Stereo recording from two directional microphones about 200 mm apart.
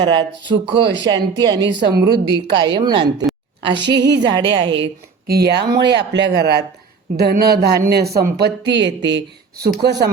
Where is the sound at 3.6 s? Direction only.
60° right (ahead or behind).